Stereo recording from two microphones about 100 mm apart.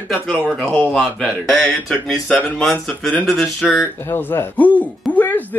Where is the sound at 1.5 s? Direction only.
5° left (ahead or behind).